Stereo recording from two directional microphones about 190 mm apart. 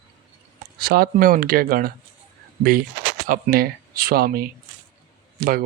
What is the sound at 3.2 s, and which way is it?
Speech, 50° right (ahead or behind).